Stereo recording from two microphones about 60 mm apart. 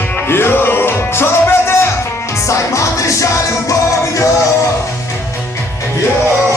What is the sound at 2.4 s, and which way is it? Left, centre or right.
Music, left.